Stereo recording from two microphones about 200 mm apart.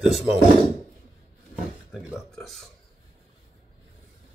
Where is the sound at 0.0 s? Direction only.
Centre (ahead or behind).